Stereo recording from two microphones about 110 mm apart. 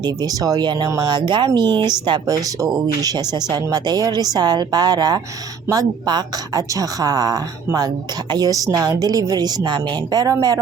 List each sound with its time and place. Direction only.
0.0 s speech: 35° right (ahead or behind)